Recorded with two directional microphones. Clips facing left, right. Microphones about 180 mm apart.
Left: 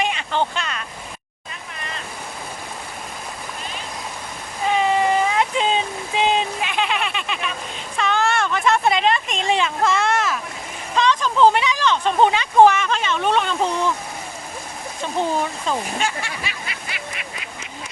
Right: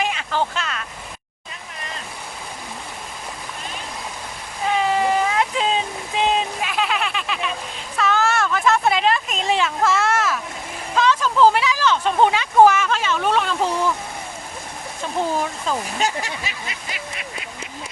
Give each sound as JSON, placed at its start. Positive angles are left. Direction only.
{"t": 0.0, "sound": "speech", "side_deg": 0}
{"t": 4.8, "sound": "a sound", "side_deg": 0}
{"t": 10.9, "sound": "speech", "side_deg": -5}
{"t": 15.4, "sound": "speech", "side_deg": 0}
{"t": 16.0, "sound": "honk", "side_deg": -40}